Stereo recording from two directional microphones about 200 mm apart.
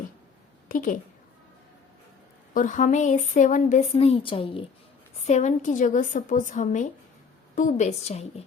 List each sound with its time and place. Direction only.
0.7 s a woman's voice: 40° left (ahead or behind)
2.5 s speech: 40° left (ahead or behind)